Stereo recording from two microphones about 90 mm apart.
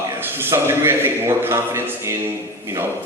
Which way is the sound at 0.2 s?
25° right (ahead or behind).